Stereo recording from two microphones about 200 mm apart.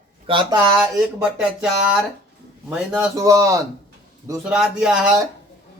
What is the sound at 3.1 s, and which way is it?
Speech, 15° right (ahead or behind).